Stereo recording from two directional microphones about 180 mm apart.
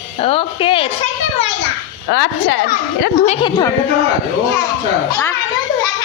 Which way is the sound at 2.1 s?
90° left.